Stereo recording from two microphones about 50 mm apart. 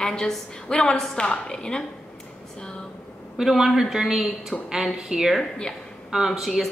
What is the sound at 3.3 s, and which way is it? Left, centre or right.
A woman's voice, centre.